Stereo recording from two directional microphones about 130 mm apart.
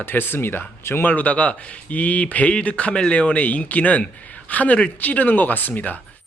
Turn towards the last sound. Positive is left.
turn(degrees=15)  # may be behind; listen again after turning